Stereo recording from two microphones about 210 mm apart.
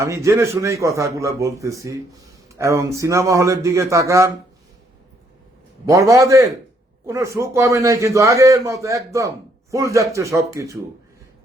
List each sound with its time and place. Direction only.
0.0 s a man's voice: 15° right (ahead or behind)
5.9 s a man's voice: 15° right (ahead or behind)